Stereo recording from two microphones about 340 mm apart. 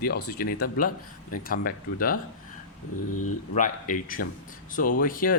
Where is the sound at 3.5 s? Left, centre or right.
Left.